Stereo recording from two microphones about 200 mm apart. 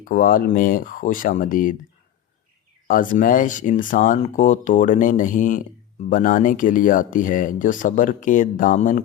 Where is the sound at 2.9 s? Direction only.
45° left (ahead or behind).